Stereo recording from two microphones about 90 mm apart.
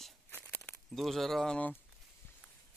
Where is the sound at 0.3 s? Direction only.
25° left (ahead or behind).